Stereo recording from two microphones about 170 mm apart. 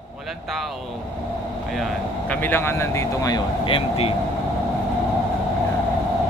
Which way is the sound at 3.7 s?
35° left (ahead or behind).